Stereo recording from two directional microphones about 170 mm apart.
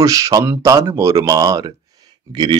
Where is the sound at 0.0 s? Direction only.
20° right (ahead or behind).